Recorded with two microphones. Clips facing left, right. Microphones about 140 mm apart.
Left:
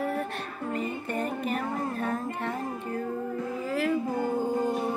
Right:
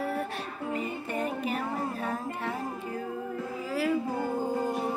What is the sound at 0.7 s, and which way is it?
Music, 5° right (ahead or behind).